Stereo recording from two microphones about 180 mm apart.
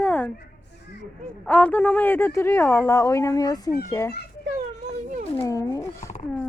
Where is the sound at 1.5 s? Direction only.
10° left (ahead or behind).